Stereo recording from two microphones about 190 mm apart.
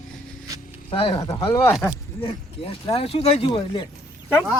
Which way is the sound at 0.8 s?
30° left (ahead or behind).